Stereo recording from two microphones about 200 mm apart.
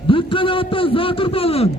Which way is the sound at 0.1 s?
25° left (ahead or behind).